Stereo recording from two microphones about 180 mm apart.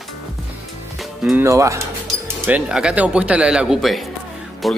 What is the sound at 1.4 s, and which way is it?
Speech, 15° right (ahead or behind).